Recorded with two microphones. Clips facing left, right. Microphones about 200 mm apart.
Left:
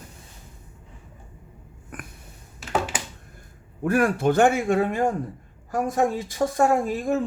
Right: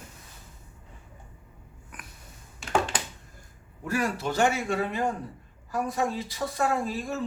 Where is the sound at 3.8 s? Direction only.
55° left (ahead or behind).